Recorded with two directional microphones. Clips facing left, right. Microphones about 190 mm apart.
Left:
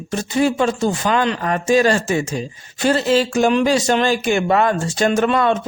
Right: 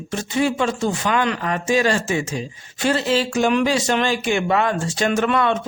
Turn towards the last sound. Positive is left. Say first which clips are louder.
# left 3 dB
turn(degrees=35)  # may be behind; listen again after turning